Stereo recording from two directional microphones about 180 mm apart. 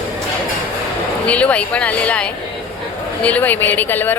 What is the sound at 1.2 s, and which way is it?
Speech, 5° left (ahead or behind).